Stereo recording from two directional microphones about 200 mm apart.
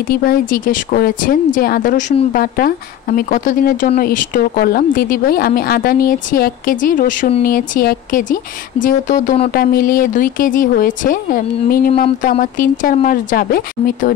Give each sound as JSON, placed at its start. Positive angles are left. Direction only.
{"t": 0.1, "sound": "speech", "side_deg": 45}